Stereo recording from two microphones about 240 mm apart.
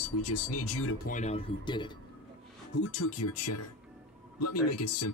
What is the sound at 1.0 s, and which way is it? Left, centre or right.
Speech, left.